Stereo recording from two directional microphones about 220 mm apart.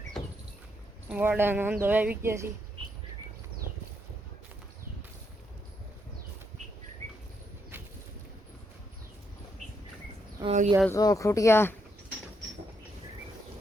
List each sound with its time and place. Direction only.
1.1 s speech: 10° right (ahead or behind)
10.4 s speech: 30° right (ahead or behind)
10.9 s speech: 15° left (ahead or behind)